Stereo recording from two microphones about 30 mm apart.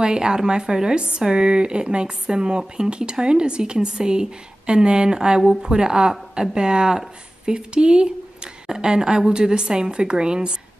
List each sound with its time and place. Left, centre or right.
0.0 s a woman's voice: right